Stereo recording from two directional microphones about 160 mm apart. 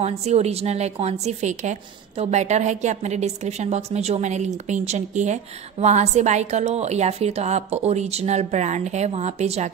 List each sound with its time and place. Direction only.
0.0 s a woman's voice: 40° right (ahead or behind)